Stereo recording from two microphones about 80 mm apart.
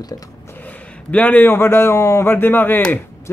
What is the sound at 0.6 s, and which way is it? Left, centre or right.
A man's voice, centre.